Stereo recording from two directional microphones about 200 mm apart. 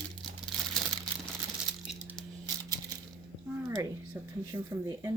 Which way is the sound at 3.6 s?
15° right (ahead or behind).